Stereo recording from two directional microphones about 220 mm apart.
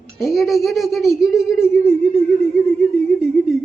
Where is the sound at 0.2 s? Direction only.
Centre (ahead or behind).